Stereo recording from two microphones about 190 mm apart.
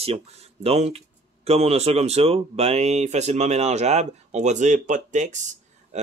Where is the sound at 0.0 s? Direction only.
30° right (ahead or behind).